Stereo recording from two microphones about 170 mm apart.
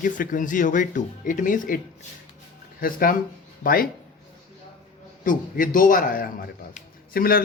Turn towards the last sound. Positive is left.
turn(degrees=60)  # may be behind; listen again after turning